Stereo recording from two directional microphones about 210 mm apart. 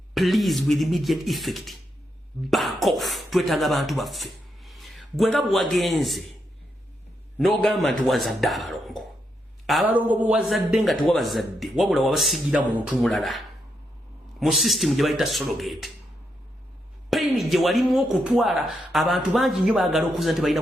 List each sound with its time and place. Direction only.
0.1 s speech: centre (ahead or behind)
7.3 s speech: centre (ahead or behind)
17.1 s speech: centre (ahead or behind)